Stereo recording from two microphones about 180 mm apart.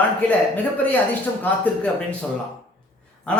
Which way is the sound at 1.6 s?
5° left (ahead or behind).